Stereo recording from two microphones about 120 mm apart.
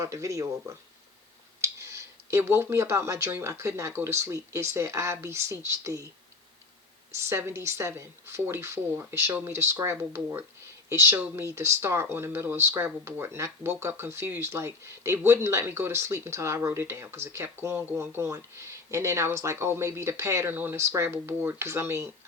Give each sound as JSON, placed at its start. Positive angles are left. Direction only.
{"t": 0.0, "sound": "speech", "side_deg": -25}
{"t": 7.1, "sound": "speech", "side_deg": -20}